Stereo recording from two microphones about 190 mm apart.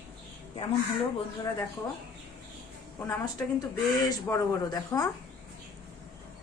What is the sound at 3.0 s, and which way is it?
Speech, 15° left (ahead or behind).